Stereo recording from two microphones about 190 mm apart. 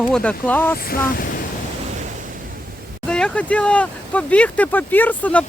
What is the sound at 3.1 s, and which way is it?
Speech, 5° left (ahead or behind).